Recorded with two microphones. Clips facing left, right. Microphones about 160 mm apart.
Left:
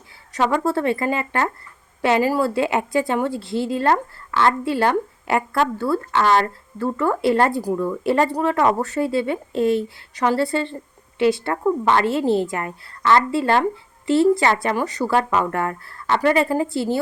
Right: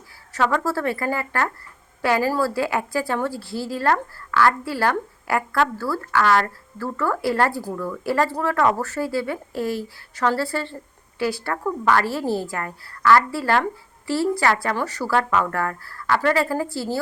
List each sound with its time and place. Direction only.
0.3 s a woman's voice: 20° left (ahead or behind)